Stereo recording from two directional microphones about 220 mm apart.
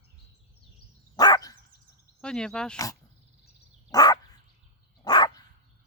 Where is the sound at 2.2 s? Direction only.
5° left (ahead or behind).